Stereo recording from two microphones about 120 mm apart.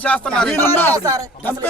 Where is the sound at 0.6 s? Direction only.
20° left (ahead or behind).